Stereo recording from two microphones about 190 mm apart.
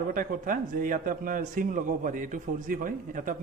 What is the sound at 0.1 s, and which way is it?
A man's voice, 45° right (ahead or behind).